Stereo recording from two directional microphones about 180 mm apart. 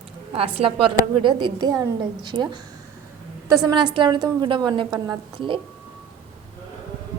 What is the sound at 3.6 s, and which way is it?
A woman's voice, 25° right (ahead or behind).